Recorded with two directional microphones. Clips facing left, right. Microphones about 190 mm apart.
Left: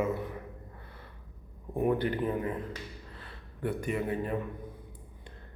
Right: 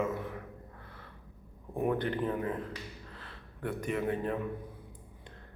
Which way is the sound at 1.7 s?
5° left (ahead or behind).